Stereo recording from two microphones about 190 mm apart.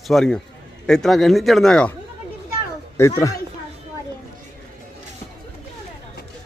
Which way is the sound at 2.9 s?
15° left (ahead or behind).